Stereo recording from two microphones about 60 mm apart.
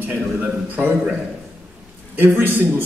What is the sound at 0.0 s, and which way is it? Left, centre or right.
Speech, right.